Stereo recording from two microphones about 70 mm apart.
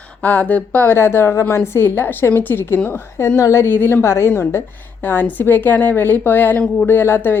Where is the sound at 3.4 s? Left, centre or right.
Left.